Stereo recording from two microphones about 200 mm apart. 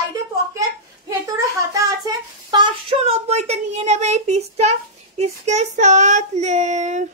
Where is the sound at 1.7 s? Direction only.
15° right (ahead or behind); by 7.1 s 35° right (ahead or behind).